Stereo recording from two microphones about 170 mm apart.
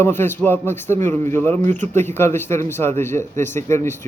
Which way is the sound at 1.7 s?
45° right (ahead or behind).